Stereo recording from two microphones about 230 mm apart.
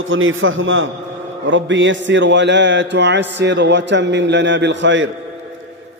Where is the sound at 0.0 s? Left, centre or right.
Right.